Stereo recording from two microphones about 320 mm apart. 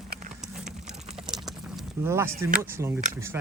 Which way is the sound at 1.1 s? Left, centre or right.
Centre.